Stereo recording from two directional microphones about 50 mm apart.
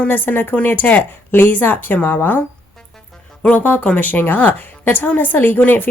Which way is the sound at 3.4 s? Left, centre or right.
Left.